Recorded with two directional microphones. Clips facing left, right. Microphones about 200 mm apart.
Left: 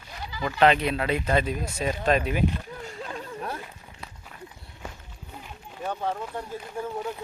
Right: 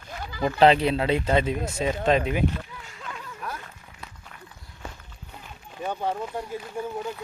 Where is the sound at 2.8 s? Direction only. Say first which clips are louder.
Left 5 dB; 35° left (ahead or behind).